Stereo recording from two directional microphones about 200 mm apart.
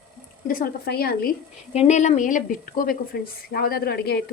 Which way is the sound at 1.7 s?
35° left (ahead or behind).